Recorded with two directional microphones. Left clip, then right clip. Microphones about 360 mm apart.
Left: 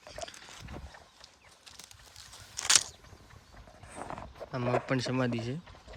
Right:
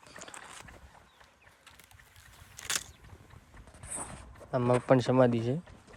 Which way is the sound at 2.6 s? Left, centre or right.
Left.